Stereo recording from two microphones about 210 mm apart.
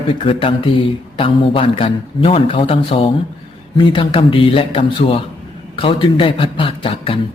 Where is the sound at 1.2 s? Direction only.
25° left (ahead or behind).